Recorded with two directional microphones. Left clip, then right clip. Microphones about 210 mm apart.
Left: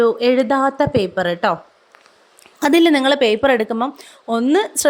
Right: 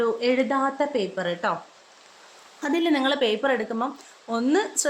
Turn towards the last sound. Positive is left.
turn(degrees=40)  # may be behind; listen again after turning